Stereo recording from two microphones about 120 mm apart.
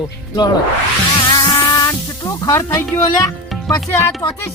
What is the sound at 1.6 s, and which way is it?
Music, 30° left (ahead or behind).